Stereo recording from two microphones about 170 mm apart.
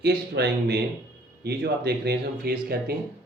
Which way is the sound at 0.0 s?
75° right (ahead or behind).